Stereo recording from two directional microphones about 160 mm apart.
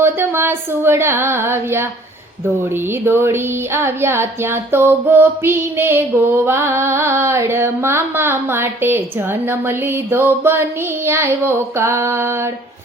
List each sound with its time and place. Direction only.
0.0 s female singing: 15° right (ahead or behind)
3.1 s female singing: 15° right (ahead or behind)